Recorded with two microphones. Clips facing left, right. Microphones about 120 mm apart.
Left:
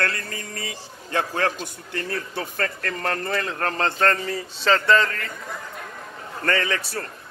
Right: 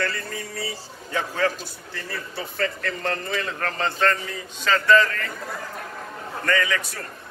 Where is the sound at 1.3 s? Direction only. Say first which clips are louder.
Even; 60° left (ahead or behind).